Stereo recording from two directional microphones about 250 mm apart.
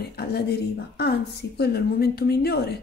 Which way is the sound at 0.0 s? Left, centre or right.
Left.